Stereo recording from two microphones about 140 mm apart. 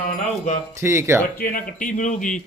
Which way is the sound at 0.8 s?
20° right (ahead or behind).